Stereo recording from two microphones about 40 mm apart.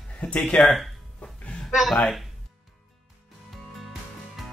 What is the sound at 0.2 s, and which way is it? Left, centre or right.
Speech, left.